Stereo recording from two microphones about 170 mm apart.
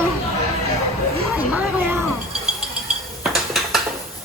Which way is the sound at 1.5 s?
15° right (ahead or behind).